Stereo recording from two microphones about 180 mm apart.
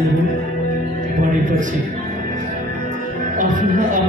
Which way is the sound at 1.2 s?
45° right (ahead or behind).